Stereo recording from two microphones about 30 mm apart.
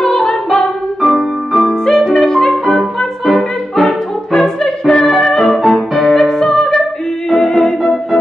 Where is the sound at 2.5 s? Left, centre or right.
Centre.